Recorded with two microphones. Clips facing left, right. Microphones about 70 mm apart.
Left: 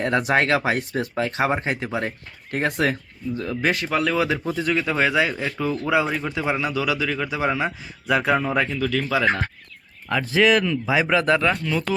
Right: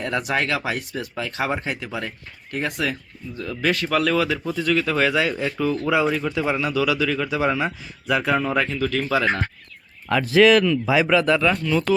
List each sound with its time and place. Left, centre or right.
0.0 s speech: left
3.3 s speech: left; by 9.4 s centre
10.3 s speech: centre
11.1 s speech: left
11.5 s speech: centre